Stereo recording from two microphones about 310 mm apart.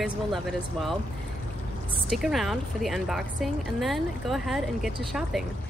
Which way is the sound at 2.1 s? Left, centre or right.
Centre.